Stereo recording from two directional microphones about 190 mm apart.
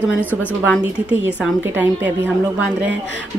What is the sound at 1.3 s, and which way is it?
A woman's voice, 5° right (ahead or behind).